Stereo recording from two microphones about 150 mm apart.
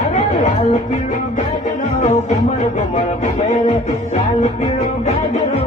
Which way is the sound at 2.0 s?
50° left (ahead or behind).